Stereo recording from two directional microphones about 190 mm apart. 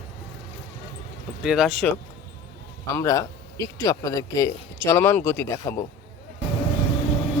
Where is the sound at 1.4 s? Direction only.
Centre (ahead or behind).